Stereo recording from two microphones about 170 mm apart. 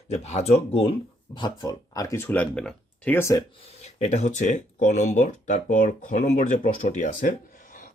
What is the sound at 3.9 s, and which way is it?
Speech, 40° left (ahead or behind).